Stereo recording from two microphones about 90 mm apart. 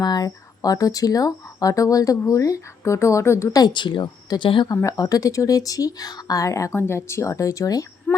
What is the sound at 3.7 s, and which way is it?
Speech, 60° left (ahead or behind).